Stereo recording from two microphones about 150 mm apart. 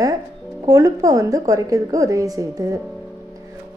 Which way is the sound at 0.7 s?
20° right (ahead or behind).